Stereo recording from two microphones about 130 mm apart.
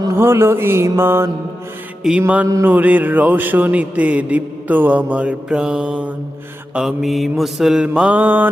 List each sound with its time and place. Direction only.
0.0 s music: 20° right (ahead or behind)
2.0 s mantra: 10° right (ahead or behind)